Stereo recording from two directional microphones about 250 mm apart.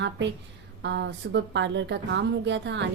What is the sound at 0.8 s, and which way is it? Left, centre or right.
A woman's voice, right.